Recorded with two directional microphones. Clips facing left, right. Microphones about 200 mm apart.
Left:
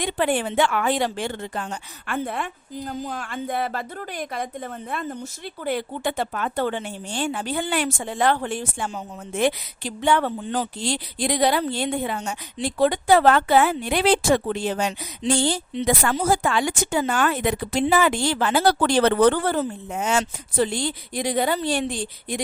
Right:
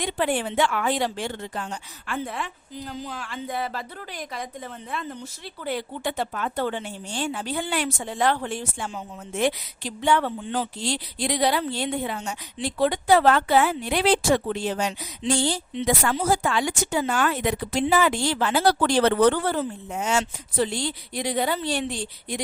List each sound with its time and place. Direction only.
0.0 s speech: 55° left (ahead or behind)